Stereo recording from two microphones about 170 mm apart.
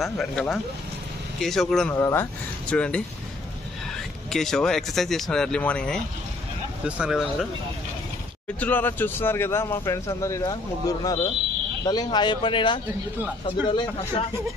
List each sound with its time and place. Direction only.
0.0 s speech: centre (ahead or behind)
2.0 s speech: 15° left (ahead or behind)
4.3 s speech: 5° left (ahead or behind)
8.5 s speech: 10° left (ahead or behind); by 14.2 s 25° left (ahead or behind)